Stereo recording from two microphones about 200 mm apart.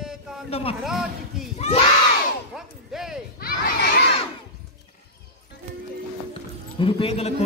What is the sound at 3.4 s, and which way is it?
Crowd, 45° left (ahead or behind).